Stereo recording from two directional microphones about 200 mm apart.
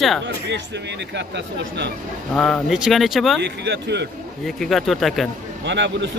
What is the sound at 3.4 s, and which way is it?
Speech, 60° right (ahead or behind).